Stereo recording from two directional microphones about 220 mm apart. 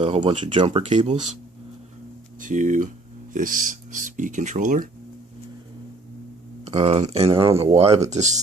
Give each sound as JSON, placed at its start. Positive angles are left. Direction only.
{"t": 0.0, "sound": "speech", "side_deg": -25}
{"t": 2.4, "sound": "speech", "side_deg": -35}
{"t": 6.6, "sound": "speech", "side_deg": -25}